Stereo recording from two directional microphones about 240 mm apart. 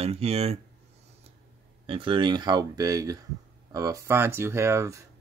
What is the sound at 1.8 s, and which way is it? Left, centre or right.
Speech, right.